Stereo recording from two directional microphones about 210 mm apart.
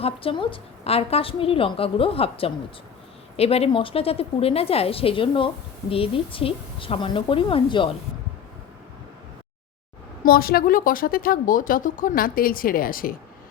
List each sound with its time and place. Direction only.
0.0 s a woman's voice: 25° left (ahead or behind)
10.2 s a woman's voice: 45° left (ahead or behind)